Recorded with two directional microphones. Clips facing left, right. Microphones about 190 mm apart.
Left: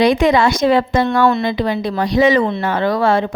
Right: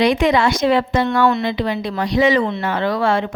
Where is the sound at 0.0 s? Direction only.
40° left (ahead or behind).